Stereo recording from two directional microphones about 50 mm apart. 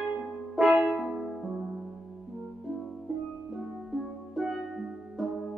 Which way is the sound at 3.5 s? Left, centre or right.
Centre.